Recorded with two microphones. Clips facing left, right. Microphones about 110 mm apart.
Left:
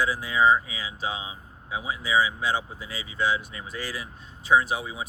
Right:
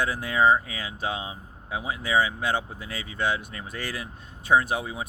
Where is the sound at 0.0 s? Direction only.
55° right (ahead or behind).